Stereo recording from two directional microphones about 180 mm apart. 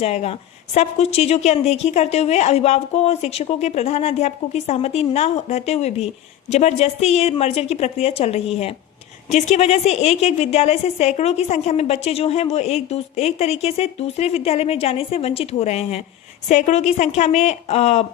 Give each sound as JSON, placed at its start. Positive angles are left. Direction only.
{"t": 0.0, "sound": "a woman's voice", "side_deg": 35}